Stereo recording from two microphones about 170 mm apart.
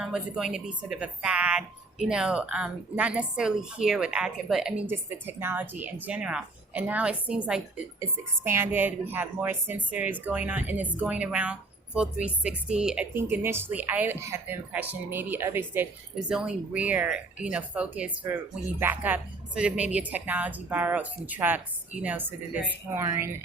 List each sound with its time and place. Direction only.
0.0 s speech: 5° right (ahead or behind)